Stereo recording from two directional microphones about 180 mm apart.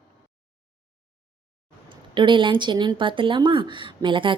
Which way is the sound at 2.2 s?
25° right (ahead or behind).